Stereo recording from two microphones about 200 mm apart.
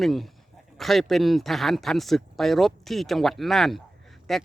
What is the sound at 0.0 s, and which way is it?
Speech, centre (ahead or behind).